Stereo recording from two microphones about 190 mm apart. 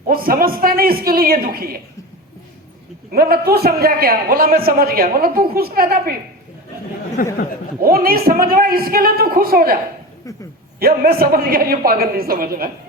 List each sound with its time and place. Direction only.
0.1 s a man's voice: 50° right (ahead or behind)
3.1 s a man's voice: 55° right (ahead or behind)
7.2 s speech: 50° left (ahead or behind)
7.8 s a man's voice: 50° right (ahead or behind)
10.3 s speech: 15° left (ahead or behind)
10.8 s a man's voice: 50° right (ahead or behind)